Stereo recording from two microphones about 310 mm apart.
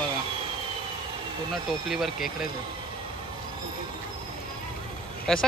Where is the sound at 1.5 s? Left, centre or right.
Centre.